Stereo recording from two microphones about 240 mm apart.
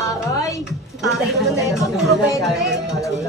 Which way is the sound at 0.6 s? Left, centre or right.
Centre.